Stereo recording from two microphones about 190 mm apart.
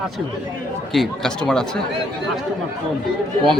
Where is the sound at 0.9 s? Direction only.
Centre (ahead or behind).